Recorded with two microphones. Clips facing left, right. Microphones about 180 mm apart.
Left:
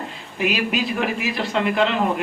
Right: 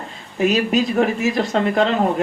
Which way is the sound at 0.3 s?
40° right (ahead or behind).